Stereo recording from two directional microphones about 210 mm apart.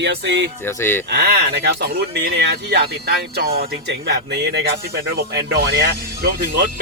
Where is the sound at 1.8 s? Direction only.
50° right (ahead or behind).